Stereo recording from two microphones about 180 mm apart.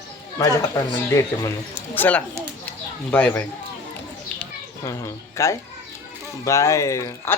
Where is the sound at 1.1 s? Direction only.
15° left (ahead or behind).